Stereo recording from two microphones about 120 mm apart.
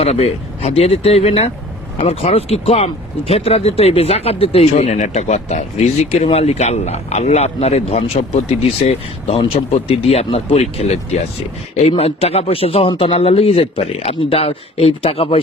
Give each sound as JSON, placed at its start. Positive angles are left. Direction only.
{"t": 0.0, "sound": "speech", "side_deg": 60}